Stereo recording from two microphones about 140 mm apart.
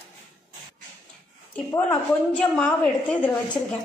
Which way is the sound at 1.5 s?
15° left (ahead or behind).